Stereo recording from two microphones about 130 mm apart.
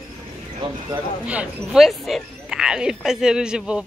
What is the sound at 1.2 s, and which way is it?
A man's voice, 10° right (ahead or behind).